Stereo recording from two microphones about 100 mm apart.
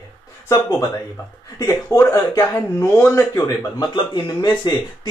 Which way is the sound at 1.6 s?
35° left (ahead or behind).